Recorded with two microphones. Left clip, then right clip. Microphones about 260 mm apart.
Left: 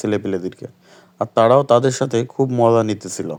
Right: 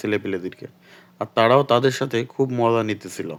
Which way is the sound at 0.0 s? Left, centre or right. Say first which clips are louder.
Left 3 dB; centre.